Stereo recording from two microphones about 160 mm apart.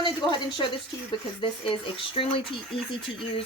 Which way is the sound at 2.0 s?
35° left (ahead or behind).